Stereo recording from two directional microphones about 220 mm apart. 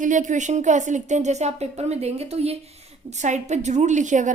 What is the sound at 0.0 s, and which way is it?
A woman's voice, 35° right (ahead or behind).